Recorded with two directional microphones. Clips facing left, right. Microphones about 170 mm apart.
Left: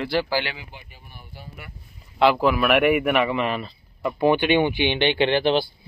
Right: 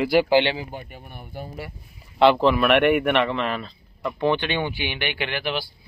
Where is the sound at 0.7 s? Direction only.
50° right (ahead or behind).